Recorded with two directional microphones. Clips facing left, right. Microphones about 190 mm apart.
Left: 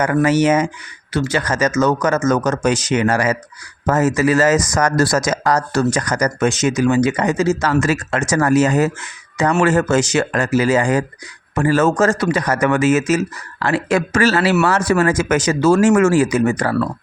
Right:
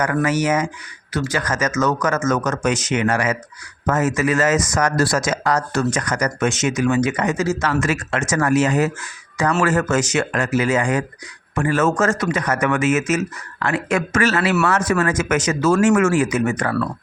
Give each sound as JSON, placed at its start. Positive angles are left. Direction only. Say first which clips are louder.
{"t": 0.0, "sound": "speech", "louder": "left 5 dB", "side_deg": 30}
{"t": 9.0, "sound": "speech", "louder": "left 3 dB", "side_deg": 25}